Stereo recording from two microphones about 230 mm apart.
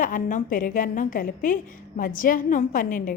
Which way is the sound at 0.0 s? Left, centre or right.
Left.